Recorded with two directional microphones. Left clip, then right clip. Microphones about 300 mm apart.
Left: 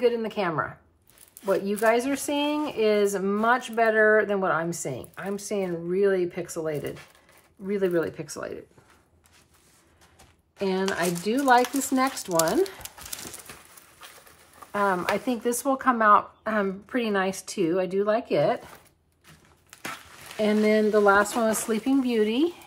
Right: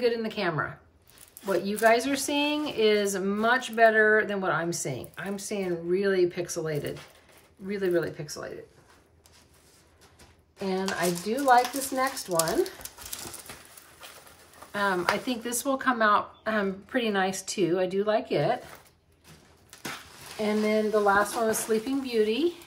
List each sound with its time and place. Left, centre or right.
0.0 s speech: centre
10.6 s speech: left
14.7 s speech: centre
20.4 s speech: left
21.5 s speech: centre